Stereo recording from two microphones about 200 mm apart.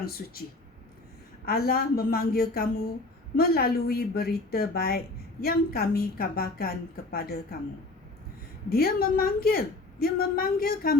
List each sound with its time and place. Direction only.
0.0 s a woman's voice: 50° left (ahead or behind)
1.5 s a woman's voice: 50° left (ahead or behind)
8.7 s a woman's voice: 50° left (ahead or behind)